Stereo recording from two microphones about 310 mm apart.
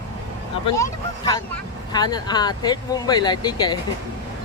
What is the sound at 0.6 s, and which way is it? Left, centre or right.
Speech, centre.